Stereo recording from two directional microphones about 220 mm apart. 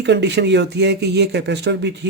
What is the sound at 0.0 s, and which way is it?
Speech, 50° right (ahead or behind).